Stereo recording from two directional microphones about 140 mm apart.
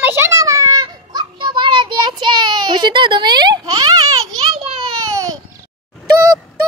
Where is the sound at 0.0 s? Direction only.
15° right (ahead or behind).